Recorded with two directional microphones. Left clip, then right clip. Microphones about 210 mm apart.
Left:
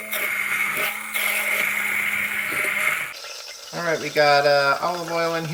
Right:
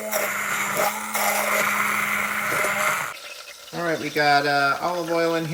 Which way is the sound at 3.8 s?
5° left (ahead or behind).